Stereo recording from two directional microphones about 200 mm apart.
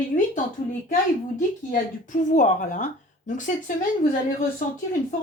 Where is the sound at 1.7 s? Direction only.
40° left (ahead or behind).